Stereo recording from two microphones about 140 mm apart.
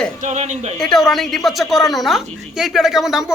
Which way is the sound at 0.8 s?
Centre (ahead or behind).